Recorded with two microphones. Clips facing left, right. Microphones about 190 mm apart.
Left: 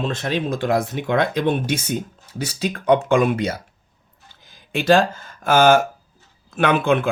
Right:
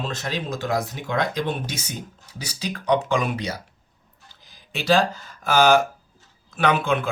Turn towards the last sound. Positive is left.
turn(degrees=55)  # may be behind; listen again after turning